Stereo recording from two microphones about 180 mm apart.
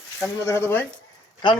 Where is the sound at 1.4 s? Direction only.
25° left (ahead or behind).